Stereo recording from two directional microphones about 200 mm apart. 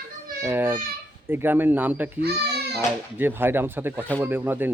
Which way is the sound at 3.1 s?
10° right (ahead or behind).